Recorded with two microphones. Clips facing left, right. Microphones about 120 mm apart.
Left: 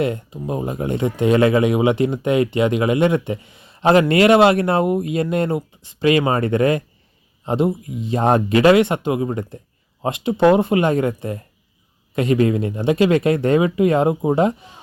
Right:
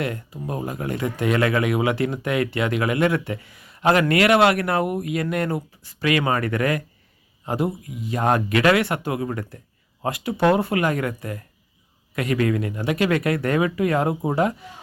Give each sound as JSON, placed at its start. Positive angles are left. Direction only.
{"t": 0.0, "sound": "speech", "side_deg": 20}